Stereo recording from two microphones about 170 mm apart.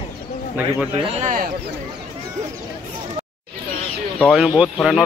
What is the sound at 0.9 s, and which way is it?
Speech, 40° right (ahead or behind).